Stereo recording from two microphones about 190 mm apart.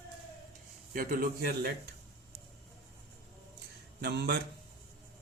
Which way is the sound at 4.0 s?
60° right (ahead or behind).